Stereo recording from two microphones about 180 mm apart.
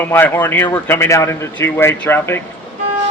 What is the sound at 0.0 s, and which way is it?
Speech, 10° left (ahead or behind).